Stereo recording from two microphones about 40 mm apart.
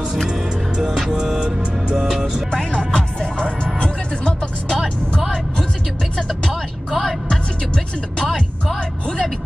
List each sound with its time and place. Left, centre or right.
1.2 s music: centre
2.7 s music: left
6.9 s music: centre
8.2 s music: centre